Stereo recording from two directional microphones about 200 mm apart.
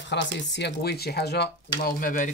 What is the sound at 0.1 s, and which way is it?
Speech, 60° left (ahead or behind).